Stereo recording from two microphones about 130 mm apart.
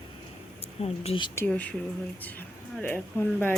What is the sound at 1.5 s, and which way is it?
Speech, 10° left (ahead or behind).